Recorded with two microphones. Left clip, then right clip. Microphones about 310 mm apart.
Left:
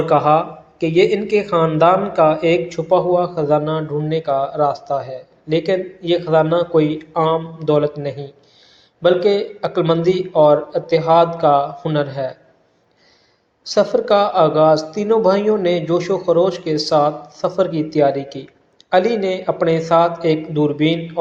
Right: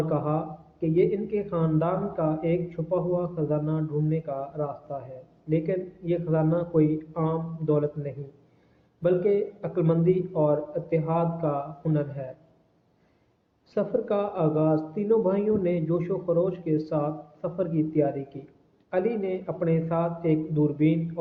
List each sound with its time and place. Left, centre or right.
0.1 s speech: centre
13.7 s speech: centre